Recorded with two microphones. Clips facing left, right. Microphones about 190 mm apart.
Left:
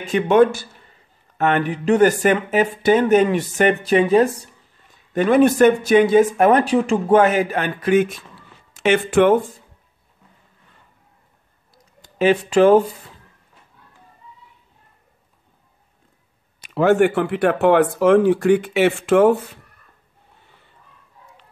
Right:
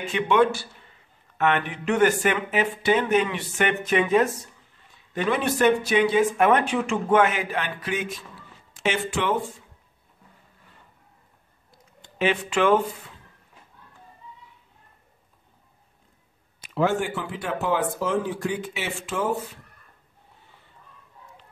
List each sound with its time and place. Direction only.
0.0 s speech: 45° left (ahead or behind)
5.1 s speech: 50° left (ahead or behind)
11.7 s a sound: 40° left (ahead or behind)
16.6 s speech: 65° left (ahead or behind)